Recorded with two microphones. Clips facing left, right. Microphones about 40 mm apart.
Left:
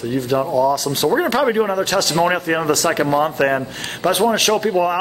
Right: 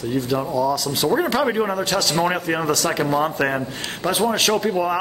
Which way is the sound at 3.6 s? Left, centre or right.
Left.